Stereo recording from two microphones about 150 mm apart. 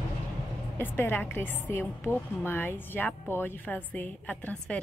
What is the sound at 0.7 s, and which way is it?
A woman's voice, 15° left (ahead or behind).